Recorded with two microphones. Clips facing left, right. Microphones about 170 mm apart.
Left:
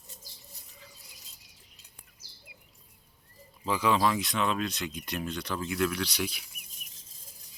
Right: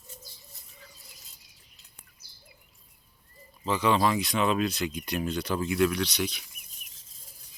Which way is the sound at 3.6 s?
5° left (ahead or behind).